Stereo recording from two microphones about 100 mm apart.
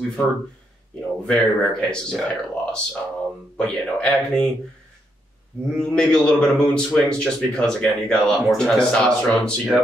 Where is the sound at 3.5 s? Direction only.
10° left (ahead or behind).